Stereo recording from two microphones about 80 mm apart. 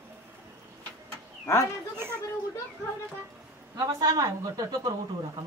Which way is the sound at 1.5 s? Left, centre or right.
Left.